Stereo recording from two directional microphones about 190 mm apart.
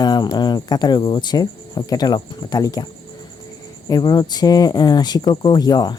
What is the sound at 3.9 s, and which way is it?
Speech, 20° left (ahead or behind).